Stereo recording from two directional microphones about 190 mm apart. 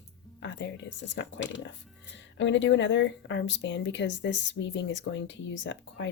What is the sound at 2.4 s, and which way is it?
Speech, 75° left (ahead or behind).